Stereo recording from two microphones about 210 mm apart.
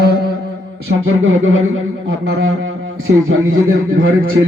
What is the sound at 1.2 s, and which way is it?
Speech, 70° right (ahead or behind).